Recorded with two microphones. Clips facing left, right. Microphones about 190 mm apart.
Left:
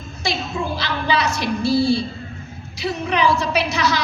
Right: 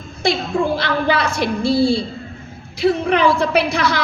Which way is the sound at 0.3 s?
55° right (ahead or behind).